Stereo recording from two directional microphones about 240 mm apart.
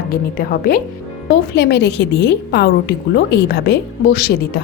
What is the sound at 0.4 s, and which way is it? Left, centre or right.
A woman's voice, left.